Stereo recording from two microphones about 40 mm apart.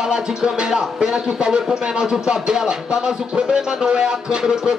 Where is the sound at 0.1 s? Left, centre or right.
Centre.